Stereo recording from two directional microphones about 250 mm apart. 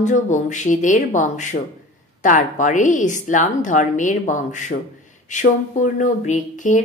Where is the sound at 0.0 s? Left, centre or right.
Left.